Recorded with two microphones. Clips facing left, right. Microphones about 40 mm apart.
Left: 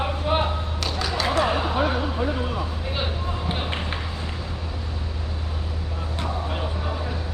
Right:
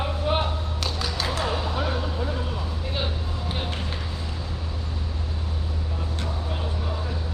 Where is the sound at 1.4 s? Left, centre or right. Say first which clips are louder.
Left 6 dB; left.